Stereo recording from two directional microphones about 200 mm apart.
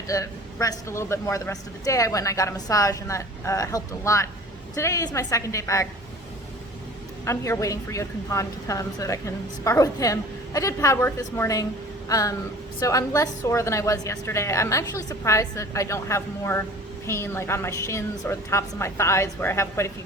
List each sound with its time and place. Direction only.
0.1 s a woman's voice: 15° left (ahead or behind)
7.3 s a woman's voice: 15° left (ahead or behind)